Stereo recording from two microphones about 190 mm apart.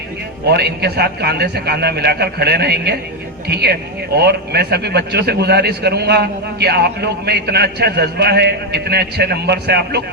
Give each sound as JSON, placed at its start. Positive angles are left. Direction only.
{"t": 0.4, "sound": "speech", "side_deg": -60}